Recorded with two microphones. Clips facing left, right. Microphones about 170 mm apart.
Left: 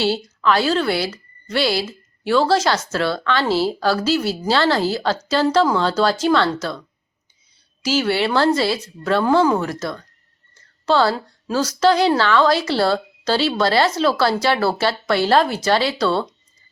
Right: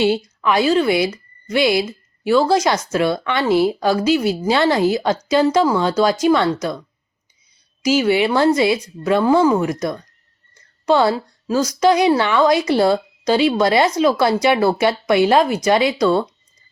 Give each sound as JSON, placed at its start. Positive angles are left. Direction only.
{"t": 0.4, "sound": "a woman's voice", "side_deg": -10}